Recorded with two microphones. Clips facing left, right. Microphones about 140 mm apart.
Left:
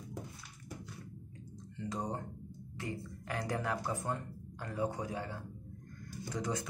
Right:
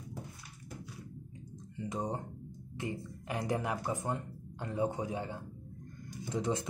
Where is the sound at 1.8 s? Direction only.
20° right (ahead or behind).